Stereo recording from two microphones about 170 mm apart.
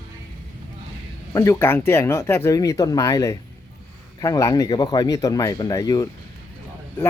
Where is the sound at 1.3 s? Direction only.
20° left (ahead or behind).